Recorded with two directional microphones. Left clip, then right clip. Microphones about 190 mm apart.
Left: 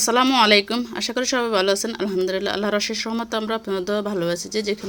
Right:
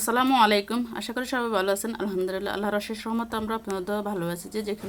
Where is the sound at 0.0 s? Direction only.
15° left (ahead or behind).